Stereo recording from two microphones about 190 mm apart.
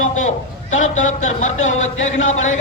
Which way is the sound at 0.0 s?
40° left (ahead or behind).